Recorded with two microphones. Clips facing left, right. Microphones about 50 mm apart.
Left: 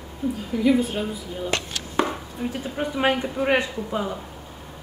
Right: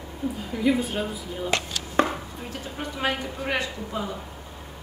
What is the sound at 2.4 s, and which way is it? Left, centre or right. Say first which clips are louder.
Speech: left 10 dB; centre.